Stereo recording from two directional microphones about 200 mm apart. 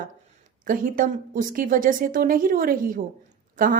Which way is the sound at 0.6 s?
45° right (ahead or behind).